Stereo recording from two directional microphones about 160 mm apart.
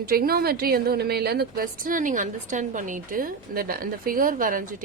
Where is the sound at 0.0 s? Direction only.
70° right (ahead or behind).